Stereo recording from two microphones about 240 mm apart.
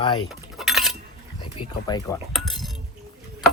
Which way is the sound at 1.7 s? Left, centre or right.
Centre.